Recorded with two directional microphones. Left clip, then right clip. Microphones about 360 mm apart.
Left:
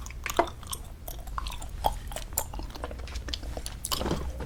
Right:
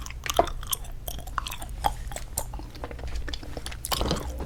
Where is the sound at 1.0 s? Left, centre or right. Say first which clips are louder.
Right 4 dB; right.